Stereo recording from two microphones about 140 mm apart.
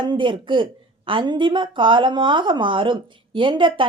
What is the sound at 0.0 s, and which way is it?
A woman's voice, 35° right (ahead or behind).